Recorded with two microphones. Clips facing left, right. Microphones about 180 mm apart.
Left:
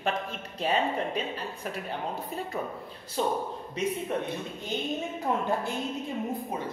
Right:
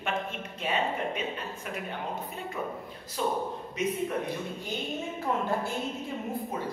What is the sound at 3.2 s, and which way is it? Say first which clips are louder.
Speech: left 2 dB; 30° left (ahead or behind).